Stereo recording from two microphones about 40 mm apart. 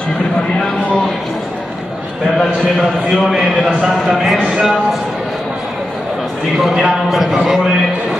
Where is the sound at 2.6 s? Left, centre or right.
Centre.